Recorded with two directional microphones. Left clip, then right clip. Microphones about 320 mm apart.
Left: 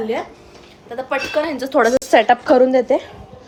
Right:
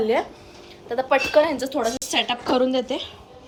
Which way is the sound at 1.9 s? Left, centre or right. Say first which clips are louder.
Left 11 dB; centre.